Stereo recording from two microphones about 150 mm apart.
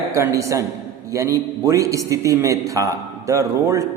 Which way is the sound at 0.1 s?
20° right (ahead or behind).